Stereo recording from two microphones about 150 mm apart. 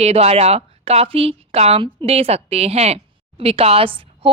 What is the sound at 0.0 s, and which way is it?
A woman's voice, 45° right (ahead or behind).